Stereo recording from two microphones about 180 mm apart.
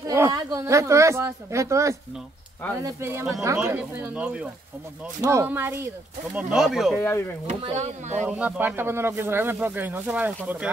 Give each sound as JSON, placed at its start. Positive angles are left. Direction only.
{"t": 0.0, "sound": "speech", "side_deg": -20}
{"t": 7.0, "sound": "speech", "side_deg": 15}
{"t": 7.4, "sound": "speech", "side_deg": -40}
{"t": 8.3, "sound": "speech", "side_deg": -10}